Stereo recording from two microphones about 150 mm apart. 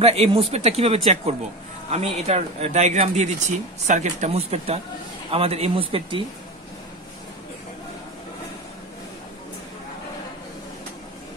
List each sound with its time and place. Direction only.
0.0 s speech: 40° right (ahead or behind)